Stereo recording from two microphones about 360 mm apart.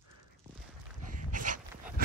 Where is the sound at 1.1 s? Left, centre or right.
Right.